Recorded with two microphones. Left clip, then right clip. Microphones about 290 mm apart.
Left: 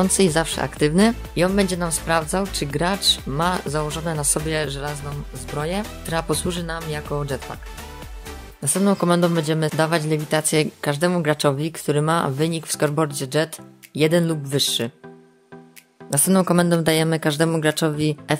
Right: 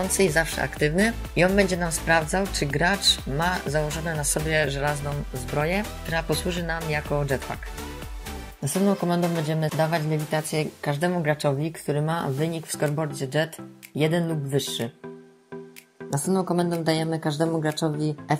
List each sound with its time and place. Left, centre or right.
0.1 s speech: centre
8.8 s speech: left
16.4 s speech: left